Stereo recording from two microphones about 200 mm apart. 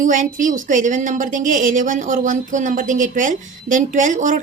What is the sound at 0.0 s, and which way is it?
A woman's voice, 40° right (ahead or behind).